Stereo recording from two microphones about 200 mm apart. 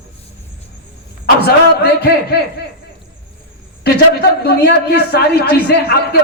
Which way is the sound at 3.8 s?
55° left (ahead or behind).